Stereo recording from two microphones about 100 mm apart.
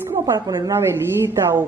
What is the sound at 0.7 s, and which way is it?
Speech, 25° right (ahead or behind).